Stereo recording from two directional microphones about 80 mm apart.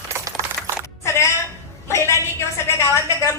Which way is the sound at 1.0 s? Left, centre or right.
Left.